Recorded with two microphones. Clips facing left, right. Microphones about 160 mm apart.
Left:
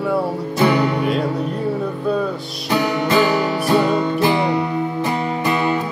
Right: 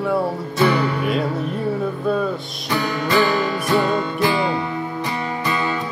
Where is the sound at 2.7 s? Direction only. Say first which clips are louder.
Left 3 dB; 20° left (ahead or behind).